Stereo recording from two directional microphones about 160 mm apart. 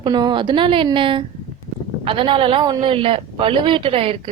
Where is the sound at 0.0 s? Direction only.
30° right (ahead or behind).